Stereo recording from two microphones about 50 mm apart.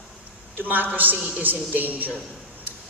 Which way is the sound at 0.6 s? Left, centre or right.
Right.